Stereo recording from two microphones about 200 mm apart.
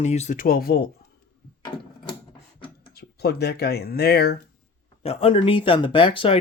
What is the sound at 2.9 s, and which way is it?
Speech, 55° left (ahead or behind).